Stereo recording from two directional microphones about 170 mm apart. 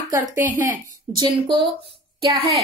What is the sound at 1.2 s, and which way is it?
Speech, 25° right (ahead or behind).